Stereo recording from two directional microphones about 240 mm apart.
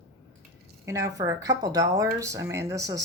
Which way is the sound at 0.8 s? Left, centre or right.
Centre.